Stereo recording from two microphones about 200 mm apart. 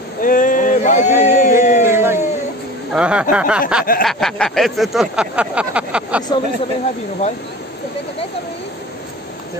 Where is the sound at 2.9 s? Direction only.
5° right (ahead or behind).